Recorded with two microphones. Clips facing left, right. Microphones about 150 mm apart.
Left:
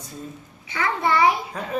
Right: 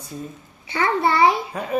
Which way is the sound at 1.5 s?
10° right (ahead or behind).